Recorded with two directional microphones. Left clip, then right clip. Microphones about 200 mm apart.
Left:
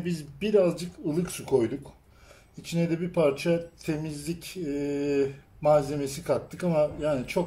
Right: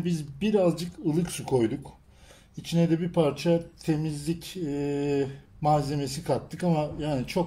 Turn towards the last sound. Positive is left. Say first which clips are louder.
# left 3 dB
turn(degrees=-35)  # may be behind; listen again after turning